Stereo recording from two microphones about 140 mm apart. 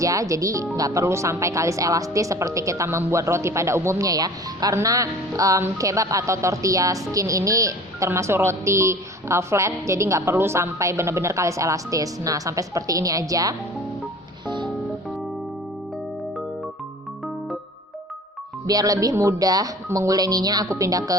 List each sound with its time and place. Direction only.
0.0 s speech: 25° right (ahead or behind)
14.4 s music: 35° right (ahead or behind)
18.6 s speech: 25° right (ahead or behind)